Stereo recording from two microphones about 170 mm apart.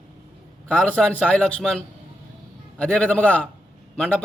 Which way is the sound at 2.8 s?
5° left (ahead or behind).